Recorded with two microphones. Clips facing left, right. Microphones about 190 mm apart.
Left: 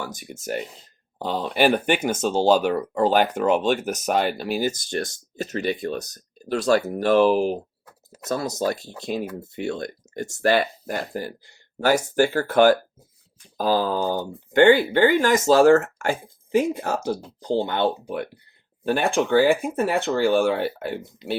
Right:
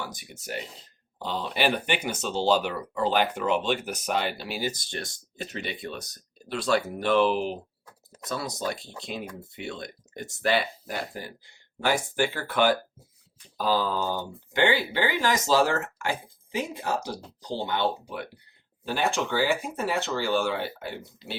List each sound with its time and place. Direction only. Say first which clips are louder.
0.0 s speech: left 5 dB; 45° left (ahead or behind)
21.2 s speech: left 11 dB; 20° left (ahead or behind)